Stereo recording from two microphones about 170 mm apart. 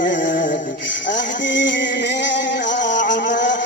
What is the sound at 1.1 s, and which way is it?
Music, 90° left.